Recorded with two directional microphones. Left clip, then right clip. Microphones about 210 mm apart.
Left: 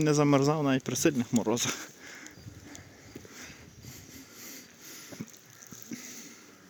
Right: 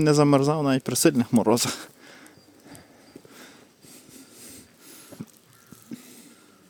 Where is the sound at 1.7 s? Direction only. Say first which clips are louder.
Right 3 dB; 20° right (ahead or behind).